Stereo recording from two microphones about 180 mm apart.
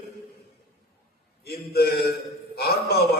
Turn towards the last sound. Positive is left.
turn(degrees=60)  # may be behind; listen again after turning